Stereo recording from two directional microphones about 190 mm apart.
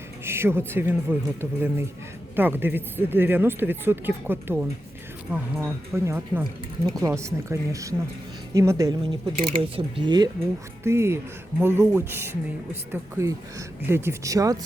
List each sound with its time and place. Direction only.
0.3 s speech: 10° right (ahead or behind)
6.4 s speech: 20° right (ahead or behind)